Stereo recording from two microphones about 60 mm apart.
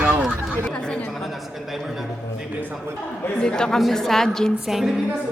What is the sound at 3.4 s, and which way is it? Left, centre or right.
A woman's voice, centre.